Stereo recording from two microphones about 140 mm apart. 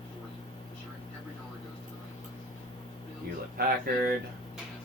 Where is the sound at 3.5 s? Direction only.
90° right.